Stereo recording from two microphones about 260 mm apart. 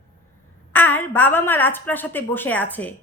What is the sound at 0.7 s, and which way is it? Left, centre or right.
A woman's voice, centre.